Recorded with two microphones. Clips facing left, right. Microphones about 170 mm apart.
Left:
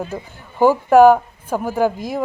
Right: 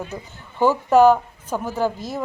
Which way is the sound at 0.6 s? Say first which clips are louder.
Left 4 dB; 10° left (ahead or behind).